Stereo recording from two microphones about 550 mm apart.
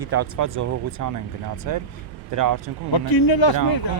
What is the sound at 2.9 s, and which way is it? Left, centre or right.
Speech, left.